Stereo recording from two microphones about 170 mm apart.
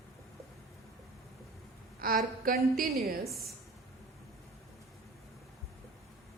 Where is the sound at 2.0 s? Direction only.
60° right (ahead or behind).